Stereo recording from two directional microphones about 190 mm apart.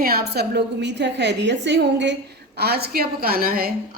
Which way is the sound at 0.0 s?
55° right (ahead or behind).